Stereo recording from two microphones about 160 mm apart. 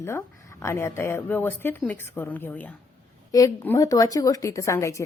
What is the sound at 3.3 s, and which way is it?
A woman's voice, 20° left (ahead or behind).